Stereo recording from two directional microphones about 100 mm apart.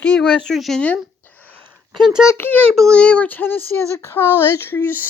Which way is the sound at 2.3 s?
20° left (ahead or behind).